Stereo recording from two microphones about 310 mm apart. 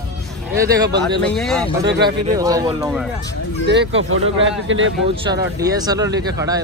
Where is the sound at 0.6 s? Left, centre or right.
Centre.